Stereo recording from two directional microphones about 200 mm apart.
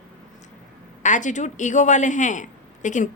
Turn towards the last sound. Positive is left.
turn(degrees=40)  # may be behind; listen again after turning